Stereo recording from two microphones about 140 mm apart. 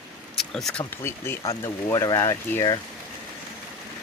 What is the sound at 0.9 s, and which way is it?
Speech, 15° left (ahead or behind).